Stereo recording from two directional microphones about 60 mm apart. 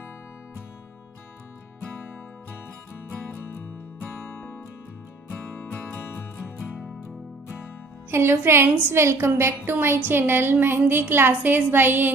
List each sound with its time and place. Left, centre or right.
5.6 s music: left
6.3 s music: left
8.1 s a woman's voice: right